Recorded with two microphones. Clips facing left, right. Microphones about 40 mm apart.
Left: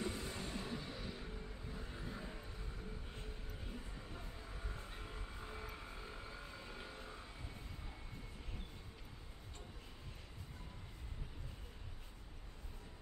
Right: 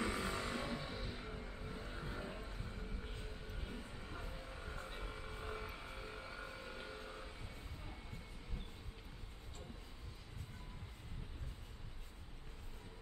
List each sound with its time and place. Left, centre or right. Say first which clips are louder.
0.0 s vehicle: right 4 dB; right
0.7 s vehicle: right 1 dB; centre
3.5 s music: right 1 dB; centre
4.7 s vehicle: right 3 dB; centre
5.8 s music: right 2 dB; centre